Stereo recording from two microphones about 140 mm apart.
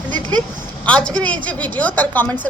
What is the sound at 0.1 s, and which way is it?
Vehicle, 30° right (ahead or behind).